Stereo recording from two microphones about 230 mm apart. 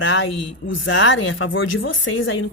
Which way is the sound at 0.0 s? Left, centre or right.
Left.